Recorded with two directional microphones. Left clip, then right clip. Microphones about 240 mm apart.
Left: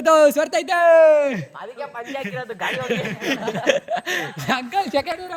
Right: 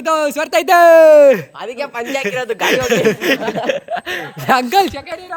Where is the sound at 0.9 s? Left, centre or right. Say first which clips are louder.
Right 7 dB; right.